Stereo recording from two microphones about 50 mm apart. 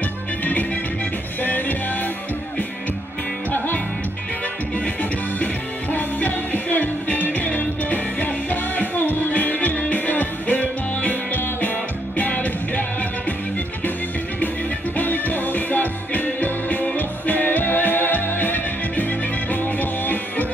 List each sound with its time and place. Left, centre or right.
1.4 s music: left
5.9 s music: left
15.0 s music: left